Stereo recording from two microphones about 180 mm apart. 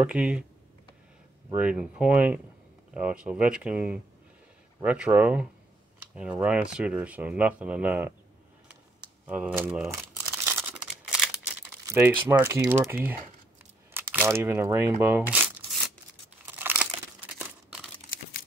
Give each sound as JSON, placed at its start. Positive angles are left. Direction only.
{"t": 0.0, "sound": "speech", "side_deg": -5}
{"t": 1.5, "sound": "speech", "side_deg": -5}
{"t": 9.0, "sound": "crumpling", "side_deg": -5}
{"t": 11.8, "sound": "speech", "side_deg": -15}
{"t": 15.3, "sound": "a sound", "side_deg": -10}
{"t": 16.4, "sound": "crumpling", "side_deg": -10}
{"t": 17.4, "sound": "a sound", "side_deg": -5}